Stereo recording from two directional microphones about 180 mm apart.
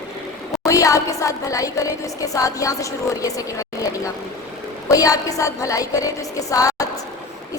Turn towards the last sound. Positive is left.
turn(degrees=20)  # may be behind; listen again after turning